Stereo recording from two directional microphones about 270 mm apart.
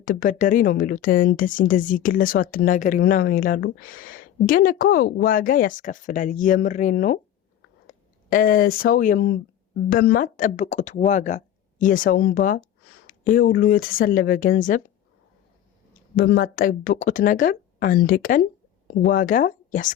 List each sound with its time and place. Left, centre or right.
0.0 s speech: left
16.1 s speech: left